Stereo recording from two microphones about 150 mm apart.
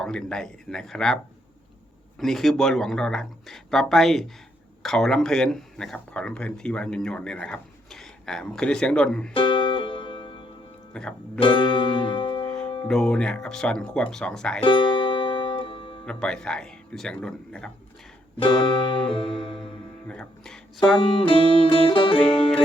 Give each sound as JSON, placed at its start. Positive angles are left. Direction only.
{"t": 0.0, "sound": "speech", "side_deg": 5}
{"t": 9.3, "sound": "music", "side_deg": 35}
{"t": 10.9, "sound": "speech", "side_deg": 10}
{"t": 11.3, "sound": "music", "side_deg": 35}
{"t": 12.9, "sound": "speech", "side_deg": 5}
{"t": 14.6, "sound": "music", "side_deg": 35}
{"t": 16.0, "sound": "speech", "side_deg": 5}
{"t": 18.3, "sound": "music", "side_deg": 35}
{"t": 20.1, "sound": "speech", "side_deg": 5}
{"t": 21.0, "sound": "music", "side_deg": 35}